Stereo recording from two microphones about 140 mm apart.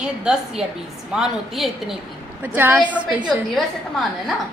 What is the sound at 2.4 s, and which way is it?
Speech, 15° right (ahead or behind).